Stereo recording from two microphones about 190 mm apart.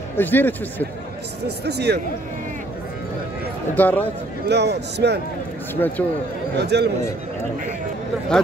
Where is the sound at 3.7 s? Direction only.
10° left (ahead or behind).